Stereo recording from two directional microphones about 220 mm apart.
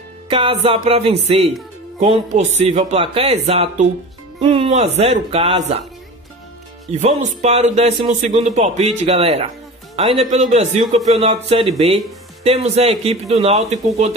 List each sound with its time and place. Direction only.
0.3 s speech: 25° right (ahead or behind)
6.9 s speech: 30° right (ahead or behind)